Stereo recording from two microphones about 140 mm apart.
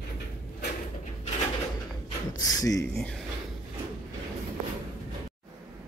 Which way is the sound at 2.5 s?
25° left (ahead or behind).